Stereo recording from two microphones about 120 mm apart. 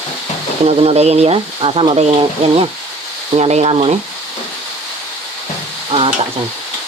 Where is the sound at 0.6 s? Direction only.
55° right (ahead or behind).